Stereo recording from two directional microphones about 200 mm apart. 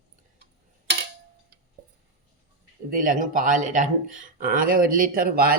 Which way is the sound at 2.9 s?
40° right (ahead or behind).